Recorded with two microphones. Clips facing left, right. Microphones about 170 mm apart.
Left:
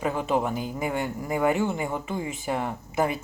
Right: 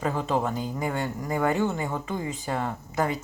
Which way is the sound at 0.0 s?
15° left (ahead or behind).